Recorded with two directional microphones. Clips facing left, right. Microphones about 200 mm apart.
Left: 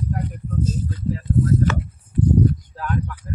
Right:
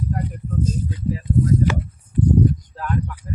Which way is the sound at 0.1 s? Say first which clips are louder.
Right 1 dB; 10° right (ahead or behind).